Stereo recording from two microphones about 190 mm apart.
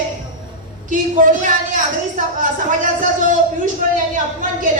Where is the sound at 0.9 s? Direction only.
45° right (ahead or behind).